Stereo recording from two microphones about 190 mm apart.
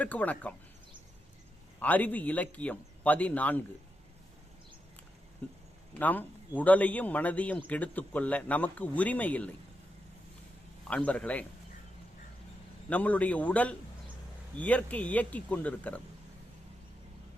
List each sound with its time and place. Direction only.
0.0 s speech: 10° left (ahead or behind)
1.8 s speech: 10° left (ahead or behind)
5.4 s speech: 5° left (ahead or behind)
10.8 s speech: 5° left (ahead or behind)
12.9 s speech: 10° left (ahead or behind)